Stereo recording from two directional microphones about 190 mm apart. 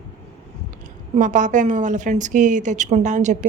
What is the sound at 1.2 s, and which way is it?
A woman's voice, 40° right (ahead or behind).